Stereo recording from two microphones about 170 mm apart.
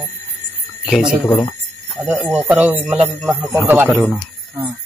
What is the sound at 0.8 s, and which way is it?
Speech, 5° right (ahead or behind).